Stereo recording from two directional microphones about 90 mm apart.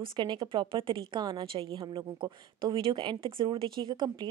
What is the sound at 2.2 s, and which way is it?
Speech, 65° right (ahead or behind).